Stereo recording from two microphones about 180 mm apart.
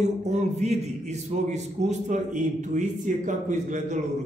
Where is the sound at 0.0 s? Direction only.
40° right (ahead or behind).